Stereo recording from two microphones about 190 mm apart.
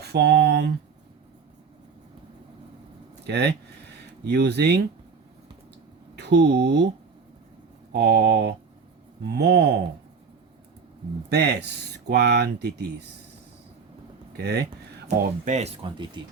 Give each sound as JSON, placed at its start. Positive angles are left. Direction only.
{"t": 0.0, "sound": "speech", "side_deg": -60}
{"t": 3.2, "sound": "speech", "side_deg": -60}
{"t": 6.1, "sound": "speech", "side_deg": -65}
{"t": 7.9, "sound": "speech", "side_deg": -60}
{"t": 11.3, "sound": "speech", "side_deg": -60}
{"t": 15.2, "sound": "speech", "side_deg": -40}